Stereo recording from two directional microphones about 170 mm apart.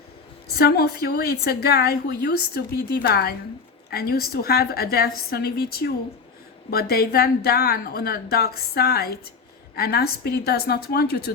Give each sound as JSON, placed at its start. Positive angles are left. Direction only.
{"t": 0.5, "sound": "a woman's voice", "side_deg": 65}